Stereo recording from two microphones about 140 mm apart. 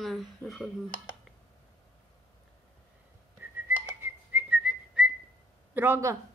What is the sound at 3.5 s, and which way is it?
Whistling, 15° right (ahead or behind).